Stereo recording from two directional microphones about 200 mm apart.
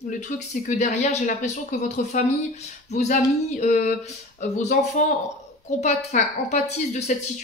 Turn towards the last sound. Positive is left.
turn(degrees=35)  # may be behind; listen again after turning